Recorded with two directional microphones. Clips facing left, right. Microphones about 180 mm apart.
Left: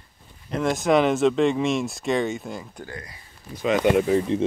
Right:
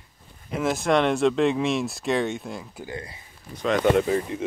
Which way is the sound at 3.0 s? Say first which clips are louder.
Right 3 dB; 25° right (ahead or behind).